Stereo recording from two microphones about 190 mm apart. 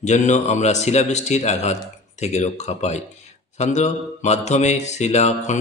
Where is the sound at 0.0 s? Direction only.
40° left (ahead or behind).